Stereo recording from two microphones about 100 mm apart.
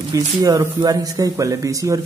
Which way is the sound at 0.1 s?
40° right (ahead or behind).